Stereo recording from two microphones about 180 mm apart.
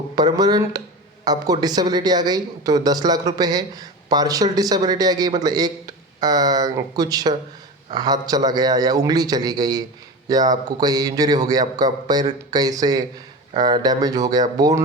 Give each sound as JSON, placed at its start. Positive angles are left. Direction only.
{"t": 0.2, "sound": "speech", "side_deg": -20}